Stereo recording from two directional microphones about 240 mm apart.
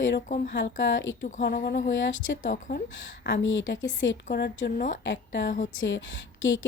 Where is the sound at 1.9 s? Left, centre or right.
Left.